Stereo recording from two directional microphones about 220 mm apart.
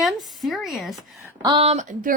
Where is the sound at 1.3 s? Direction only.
20° right (ahead or behind).